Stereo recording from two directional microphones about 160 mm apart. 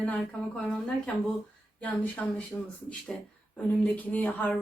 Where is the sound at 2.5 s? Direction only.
20° left (ahead or behind).